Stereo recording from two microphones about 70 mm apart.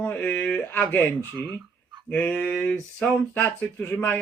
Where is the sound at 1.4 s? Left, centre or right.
Right.